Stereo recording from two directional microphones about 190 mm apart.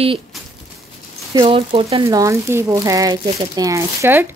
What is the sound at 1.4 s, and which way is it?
Speech, 30° right (ahead or behind).